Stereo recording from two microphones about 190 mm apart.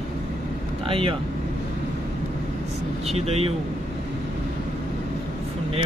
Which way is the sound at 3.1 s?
35° right (ahead or behind).